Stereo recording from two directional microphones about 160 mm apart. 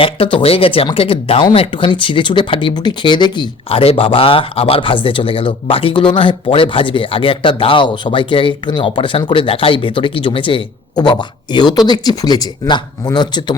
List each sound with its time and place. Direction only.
0.0 s speech: 35° left (ahead or behind)